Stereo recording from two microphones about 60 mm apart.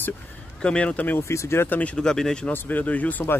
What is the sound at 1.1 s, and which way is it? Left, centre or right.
Speech, left.